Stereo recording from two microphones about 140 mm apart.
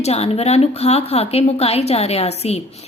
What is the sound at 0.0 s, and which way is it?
A woman's voice, 50° left (ahead or behind).